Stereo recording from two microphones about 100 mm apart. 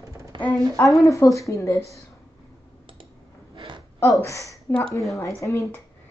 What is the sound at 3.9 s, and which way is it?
Speech, 30° left (ahead or behind).